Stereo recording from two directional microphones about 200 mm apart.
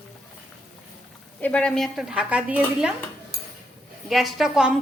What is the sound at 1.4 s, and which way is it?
A woman's voice, 5° left (ahead or behind).